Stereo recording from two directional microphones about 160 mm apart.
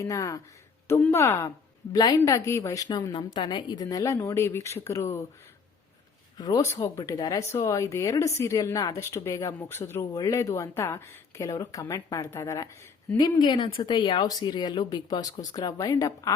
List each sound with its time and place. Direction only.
0.0 s speech: 20° left (ahead or behind)
6.3 s speech: 25° left (ahead or behind)